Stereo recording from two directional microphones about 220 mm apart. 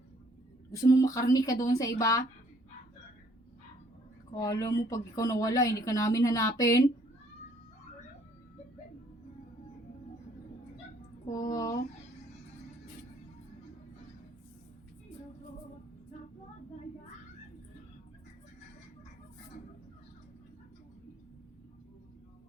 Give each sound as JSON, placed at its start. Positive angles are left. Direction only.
{"t": 0.7, "sound": "speech", "side_deg": 15}
{"t": 4.4, "sound": "speech", "side_deg": 15}
{"t": 11.3, "sound": "speech", "side_deg": 15}